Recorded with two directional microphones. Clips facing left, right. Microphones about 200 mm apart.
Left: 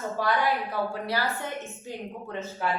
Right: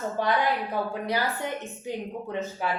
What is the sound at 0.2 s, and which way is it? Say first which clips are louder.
A woman's voice: right 1 dB; 20° right (ahead or behind).